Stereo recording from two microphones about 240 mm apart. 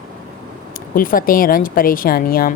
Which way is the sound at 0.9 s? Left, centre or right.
Left.